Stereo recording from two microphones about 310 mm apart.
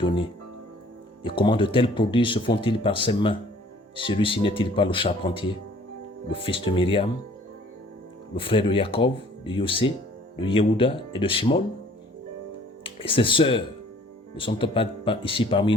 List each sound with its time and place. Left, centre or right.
1.2 s speech: centre
8.4 s speech: centre
12.8 s speech: centre